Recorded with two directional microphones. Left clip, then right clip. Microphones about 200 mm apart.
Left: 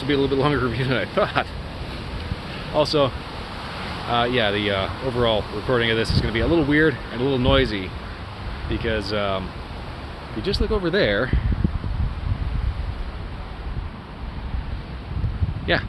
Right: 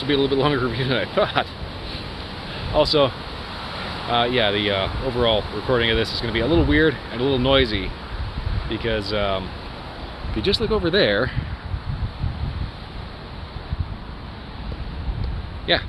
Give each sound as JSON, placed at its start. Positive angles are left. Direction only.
{"t": 0.1, "sound": "speech", "side_deg": 0}
{"t": 2.7, "sound": "speech", "side_deg": 0}
{"t": 4.1, "sound": "speech", "side_deg": 0}
{"t": 10.4, "sound": "speech", "side_deg": -25}
{"t": 10.7, "sound": "speech", "side_deg": -5}